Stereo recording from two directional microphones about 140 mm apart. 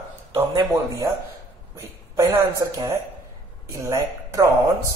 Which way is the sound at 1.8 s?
20° right (ahead or behind).